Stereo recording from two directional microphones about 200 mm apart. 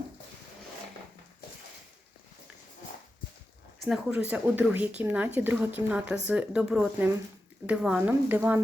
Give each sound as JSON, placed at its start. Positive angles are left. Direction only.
{"t": 3.8, "sound": "speech", "side_deg": -5}